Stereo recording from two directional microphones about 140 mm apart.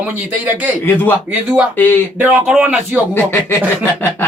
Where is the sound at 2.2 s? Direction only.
10° right (ahead or behind).